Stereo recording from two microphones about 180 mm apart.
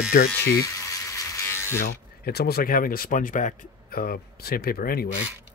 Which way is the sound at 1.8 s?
60° left (ahead or behind).